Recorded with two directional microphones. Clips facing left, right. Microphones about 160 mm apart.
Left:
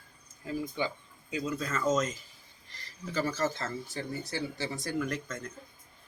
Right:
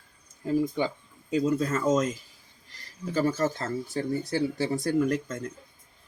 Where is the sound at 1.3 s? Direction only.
35° right (ahead or behind).